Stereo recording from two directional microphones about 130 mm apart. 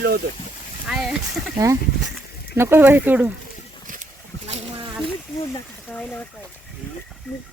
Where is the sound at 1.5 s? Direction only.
20° right (ahead or behind).